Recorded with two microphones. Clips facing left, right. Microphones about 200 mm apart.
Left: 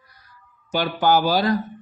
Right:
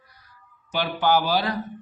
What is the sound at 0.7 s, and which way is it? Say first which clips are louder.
Speech: left 3 dB; 45° left (ahead or behind).